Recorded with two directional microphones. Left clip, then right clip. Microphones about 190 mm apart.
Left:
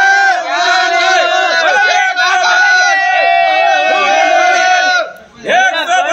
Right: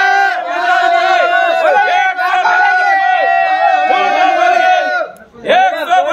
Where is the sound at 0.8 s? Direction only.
50° left (ahead or behind).